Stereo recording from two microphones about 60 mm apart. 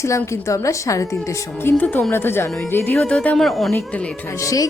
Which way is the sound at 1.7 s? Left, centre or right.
Left.